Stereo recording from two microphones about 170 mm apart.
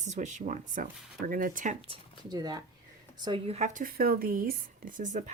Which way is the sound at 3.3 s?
35° right (ahead or behind).